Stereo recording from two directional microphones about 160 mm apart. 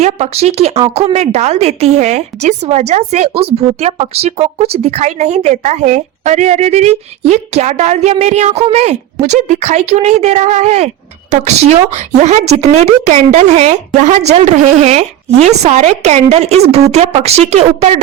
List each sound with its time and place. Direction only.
0.0 s a woman's voice: 40° right (ahead or behind)